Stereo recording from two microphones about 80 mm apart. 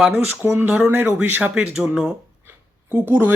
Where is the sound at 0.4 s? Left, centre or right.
Right.